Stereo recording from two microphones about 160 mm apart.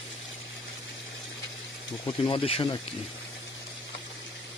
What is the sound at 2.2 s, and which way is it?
Speech, 35° left (ahead or behind).